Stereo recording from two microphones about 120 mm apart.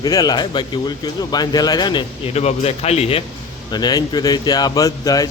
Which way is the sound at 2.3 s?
60° left (ahead or behind).